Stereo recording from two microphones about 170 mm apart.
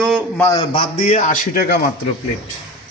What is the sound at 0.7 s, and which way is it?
A man's voice, 35° left (ahead or behind).